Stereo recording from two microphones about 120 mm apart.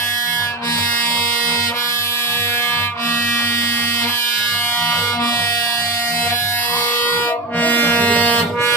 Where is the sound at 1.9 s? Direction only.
20° left (ahead or behind).